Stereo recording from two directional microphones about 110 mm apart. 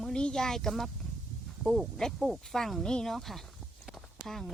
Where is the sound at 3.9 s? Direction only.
Centre (ahead or behind).